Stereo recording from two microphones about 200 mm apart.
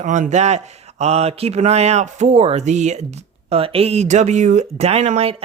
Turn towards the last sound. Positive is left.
turn(degrees=-30)  # may be behind; listen again after turning